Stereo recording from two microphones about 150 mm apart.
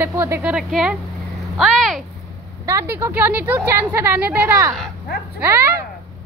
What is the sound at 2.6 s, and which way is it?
A woman's voice, 15° right (ahead or behind).